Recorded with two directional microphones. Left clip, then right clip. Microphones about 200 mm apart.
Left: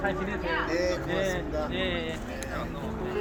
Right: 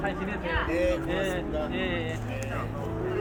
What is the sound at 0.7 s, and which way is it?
Speech, 25° right (ahead or behind).